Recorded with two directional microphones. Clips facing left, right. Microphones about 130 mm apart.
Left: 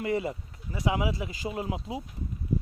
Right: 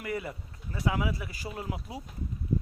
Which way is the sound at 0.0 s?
25° left (ahead or behind).